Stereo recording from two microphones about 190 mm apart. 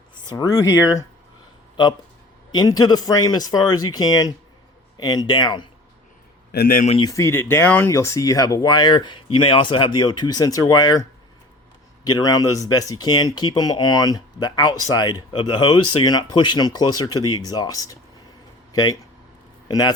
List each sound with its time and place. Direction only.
0.3 s speech: 20° left (ahead or behind)
6.5 s speech: 50° left (ahead or behind)
7.0 s speech: 15° left (ahead or behind)
12.0 s speech: 20° left (ahead or behind)